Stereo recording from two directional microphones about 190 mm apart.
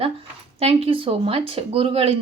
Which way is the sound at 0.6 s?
30° right (ahead or behind).